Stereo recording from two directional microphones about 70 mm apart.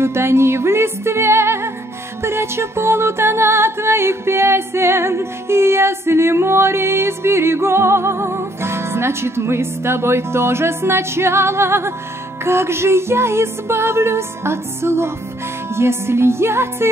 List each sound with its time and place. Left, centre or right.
0.0 s music: right